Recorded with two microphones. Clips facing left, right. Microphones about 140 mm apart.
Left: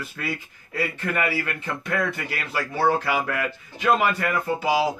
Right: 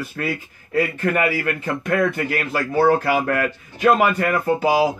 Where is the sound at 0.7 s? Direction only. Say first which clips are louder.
Right 6 dB; 45° right (ahead or behind).